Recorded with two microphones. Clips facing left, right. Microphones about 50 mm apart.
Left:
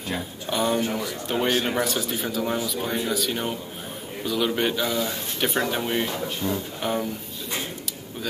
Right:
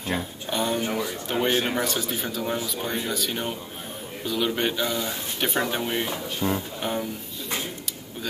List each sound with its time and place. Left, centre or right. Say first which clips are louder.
0.5 s speech: left 2 dB; centre
6.4 s speech: right 2 dB; right
6.8 s speech: left 2 dB; centre